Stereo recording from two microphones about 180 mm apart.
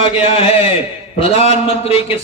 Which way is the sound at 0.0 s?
30° left (ahead or behind).